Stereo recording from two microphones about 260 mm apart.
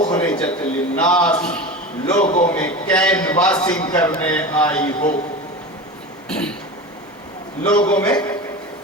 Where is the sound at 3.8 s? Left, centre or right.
Centre.